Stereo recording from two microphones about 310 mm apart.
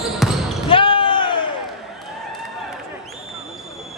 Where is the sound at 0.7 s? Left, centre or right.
Centre.